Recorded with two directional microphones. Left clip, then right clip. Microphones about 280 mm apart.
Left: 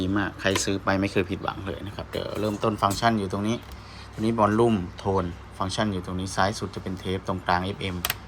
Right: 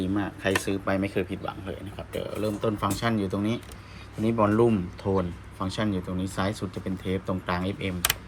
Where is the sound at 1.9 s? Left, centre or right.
Left.